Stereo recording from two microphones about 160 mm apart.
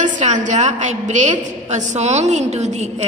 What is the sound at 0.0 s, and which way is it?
A woman's voice, 50° right (ahead or behind).